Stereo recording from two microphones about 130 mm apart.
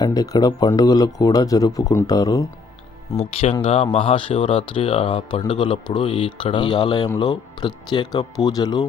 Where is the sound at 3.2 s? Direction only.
50° left (ahead or behind).